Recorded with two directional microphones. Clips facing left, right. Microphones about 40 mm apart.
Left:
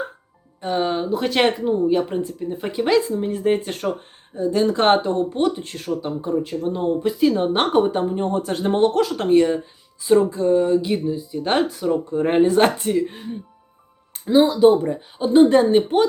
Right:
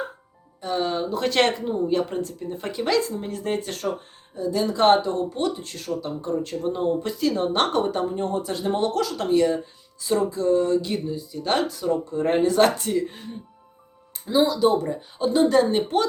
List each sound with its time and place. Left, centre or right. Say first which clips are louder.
0.6 s speech: left 3 dB; left
1.1 s speech: left 2 dB; centre
3.6 s speech: left 3 dB; left
6.2 s speech: left 2 dB; centre
7.3 s speech: left 2 dB; left
8.3 s speech: left 4 dB; left; by 13.3 s centre
14.4 s speech: left 5 dB; left
15.7 s speech: left 5 dB; centre